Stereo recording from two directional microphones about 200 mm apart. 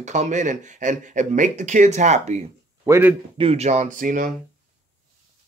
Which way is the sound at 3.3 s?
30° right (ahead or behind).